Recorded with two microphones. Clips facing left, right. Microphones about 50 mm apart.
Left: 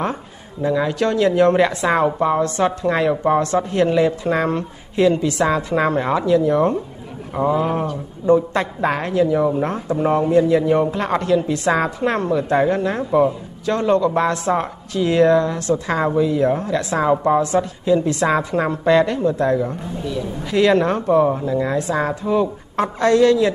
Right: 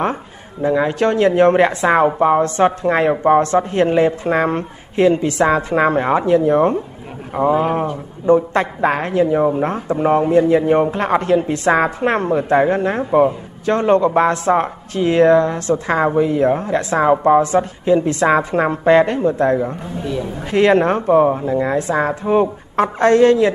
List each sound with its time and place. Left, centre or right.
0.0 s speech: right
17.4 s speech: right